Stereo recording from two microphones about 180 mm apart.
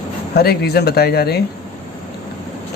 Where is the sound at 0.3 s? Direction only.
60° left (ahead or behind).